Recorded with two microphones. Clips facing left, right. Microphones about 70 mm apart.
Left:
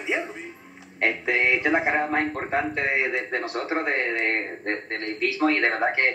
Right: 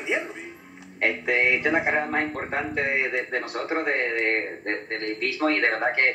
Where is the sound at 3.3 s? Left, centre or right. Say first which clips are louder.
Left 1 dB; left.